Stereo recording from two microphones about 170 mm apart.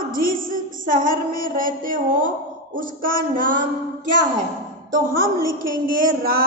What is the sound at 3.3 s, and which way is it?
Speech, 50° right (ahead or behind).